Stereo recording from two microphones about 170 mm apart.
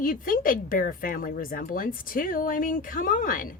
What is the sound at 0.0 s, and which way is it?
A woman's voice, 55° left (ahead or behind).